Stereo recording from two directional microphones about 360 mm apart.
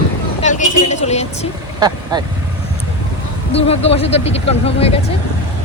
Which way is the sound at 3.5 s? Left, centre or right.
Centre.